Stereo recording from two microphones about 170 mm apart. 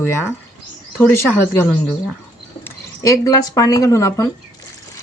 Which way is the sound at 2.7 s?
20° left (ahead or behind).